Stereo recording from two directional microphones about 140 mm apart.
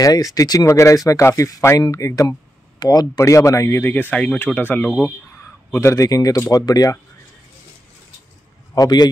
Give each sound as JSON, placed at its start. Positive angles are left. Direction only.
{"t": 0.0, "sound": "speech", "side_deg": 25}
{"t": 8.7, "sound": "a man's voice", "side_deg": 25}